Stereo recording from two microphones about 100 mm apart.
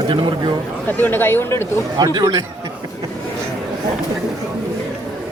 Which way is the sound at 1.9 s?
45° right (ahead or behind).